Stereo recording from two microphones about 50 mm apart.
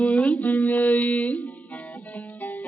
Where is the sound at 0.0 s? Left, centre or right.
Left.